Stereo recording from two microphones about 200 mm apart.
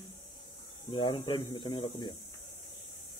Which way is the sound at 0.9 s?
25° left (ahead or behind).